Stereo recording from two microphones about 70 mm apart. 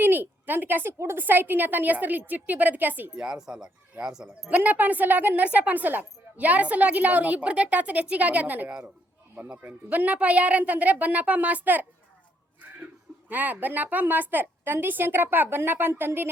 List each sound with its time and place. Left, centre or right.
0.0 s a woman's voice: right
3.2 s speech: centre
4.4 s a woman's voice: right
13.2 s a woman's voice: right